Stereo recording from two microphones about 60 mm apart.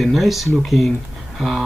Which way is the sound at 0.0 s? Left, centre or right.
Centre.